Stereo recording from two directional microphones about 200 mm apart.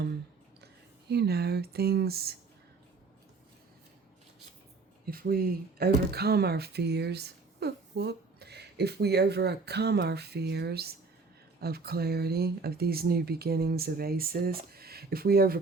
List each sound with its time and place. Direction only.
1.1 s speech: 55° right (ahead or behind)
5.1 s speech: 50° right (ahead or behind)